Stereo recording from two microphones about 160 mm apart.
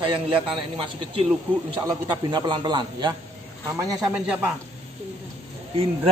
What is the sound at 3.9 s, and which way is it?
Speech, 5° right (ahead or behind).